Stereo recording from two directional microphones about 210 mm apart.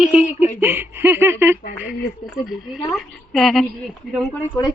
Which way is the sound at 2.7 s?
Centre (ahead or behind).